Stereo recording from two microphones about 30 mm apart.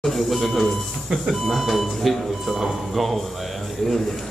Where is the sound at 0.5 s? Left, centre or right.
Centre.